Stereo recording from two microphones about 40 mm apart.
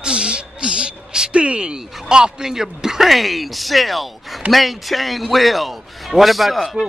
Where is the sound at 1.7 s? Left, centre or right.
Centre.